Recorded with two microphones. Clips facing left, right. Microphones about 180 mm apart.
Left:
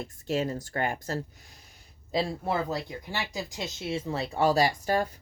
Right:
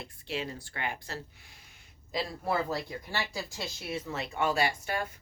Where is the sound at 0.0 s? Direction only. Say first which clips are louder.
Left 7 dB; 45° left (ahead or behind).